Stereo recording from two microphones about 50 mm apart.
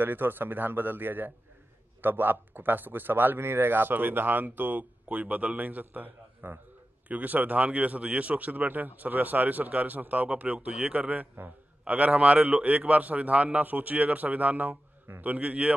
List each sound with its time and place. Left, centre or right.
0.0 s a man's voice: right